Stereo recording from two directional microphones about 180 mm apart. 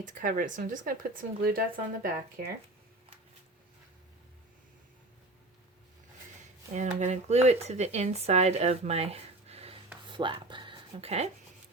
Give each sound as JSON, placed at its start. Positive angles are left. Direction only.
{"t": 0.0, "sound": "speech", "side_deg": -50}
{"t": 6.7, "sound": "speech", "side_deg": -40}